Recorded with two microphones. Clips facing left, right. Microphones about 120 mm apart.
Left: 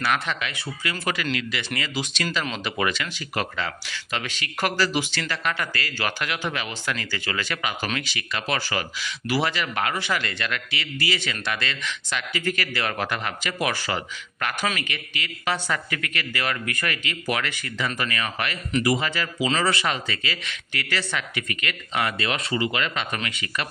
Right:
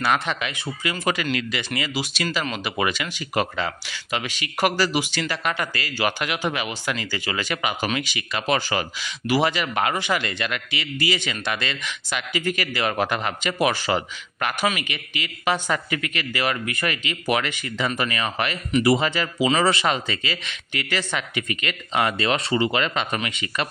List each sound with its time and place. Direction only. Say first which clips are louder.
0.0 s speech: right 2 dB; 20° right (ahead or behind)
1.8 s speech: right 2 dB; 10° right (ahead or behind); by 23.7 s 25° right (ahead or behind)